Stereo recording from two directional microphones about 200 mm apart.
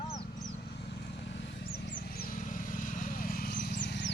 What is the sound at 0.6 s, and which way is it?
Vehicle, 55° left (ahead or behind).